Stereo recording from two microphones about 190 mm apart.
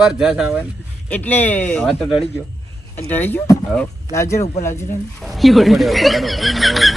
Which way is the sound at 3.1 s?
10° left (ahead or behind).